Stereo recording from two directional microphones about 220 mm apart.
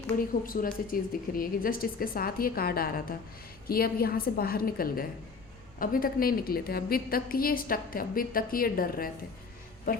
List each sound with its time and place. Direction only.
0.4 s a woman's voice: 40° left (ahead or behind)